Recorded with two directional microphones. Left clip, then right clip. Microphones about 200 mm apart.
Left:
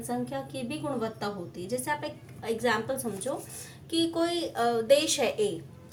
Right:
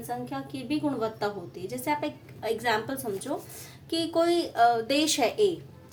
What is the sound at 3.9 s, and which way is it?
A woman's voice, 25° right (ahead or behind).